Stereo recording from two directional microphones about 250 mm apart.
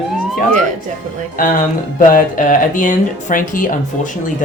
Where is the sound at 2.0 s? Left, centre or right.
Left.